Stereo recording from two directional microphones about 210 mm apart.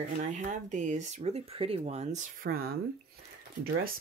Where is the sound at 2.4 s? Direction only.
45° right (ahead or behind).